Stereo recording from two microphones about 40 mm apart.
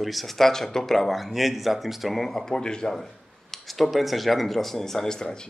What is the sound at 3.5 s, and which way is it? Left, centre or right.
Speech, centre.